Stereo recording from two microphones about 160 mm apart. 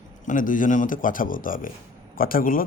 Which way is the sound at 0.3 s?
55° left (ahead or behind).